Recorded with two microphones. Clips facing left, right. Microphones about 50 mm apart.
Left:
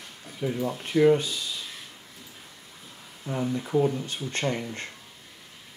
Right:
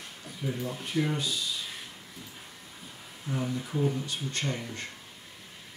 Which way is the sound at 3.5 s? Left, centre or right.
Left.